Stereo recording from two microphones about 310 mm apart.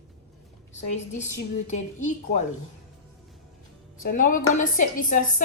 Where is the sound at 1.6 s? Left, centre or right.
Left.